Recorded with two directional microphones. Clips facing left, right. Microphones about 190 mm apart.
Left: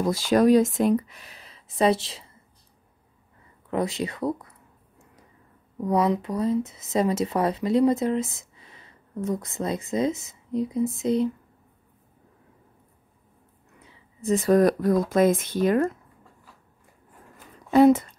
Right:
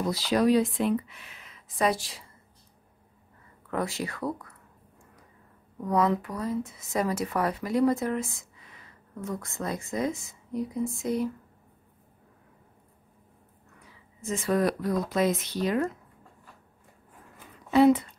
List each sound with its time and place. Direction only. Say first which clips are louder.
0.0 s speech: left 5 dB; 50° left (ahead or behind); by 2.3 s 25° left (ahead or behind)
3.7 s a sound: left 4 dB; 20° left (ahead or behind)
5.8 s speech: left 3 dB; 20° left (ahead or behind)
14.2 s speech: left 7 dB; 40° left (ahead or behind)
17.6 s speech: left 3 dB; 45° left (ahead or behind)